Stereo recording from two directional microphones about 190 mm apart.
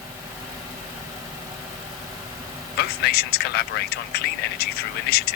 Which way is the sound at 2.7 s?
55° left (ahead or behind).